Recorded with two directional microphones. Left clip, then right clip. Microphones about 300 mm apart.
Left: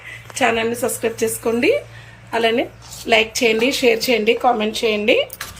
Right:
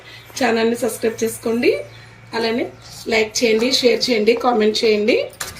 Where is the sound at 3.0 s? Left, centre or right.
Centre.